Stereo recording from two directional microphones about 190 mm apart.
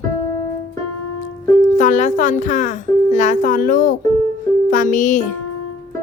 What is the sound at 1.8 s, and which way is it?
A child's voice, 40° left (ahead or behind).